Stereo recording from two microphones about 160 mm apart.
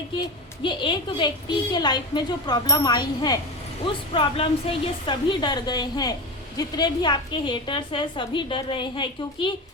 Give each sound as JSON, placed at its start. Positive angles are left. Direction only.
{"t": 0.6, "sound": "a woman's voice", "side_deg": 30}